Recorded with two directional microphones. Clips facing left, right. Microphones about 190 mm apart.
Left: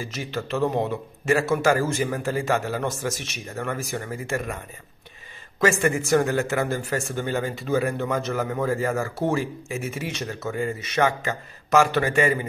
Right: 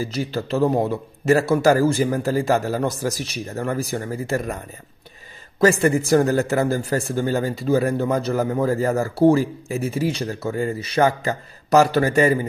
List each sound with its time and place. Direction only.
0.0 s a man's voice: 35° right (ahead or behind)
5.6 s a man's voice: 35° right (ahead or behind)